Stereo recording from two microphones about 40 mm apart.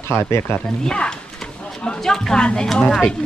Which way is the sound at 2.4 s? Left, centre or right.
Centre.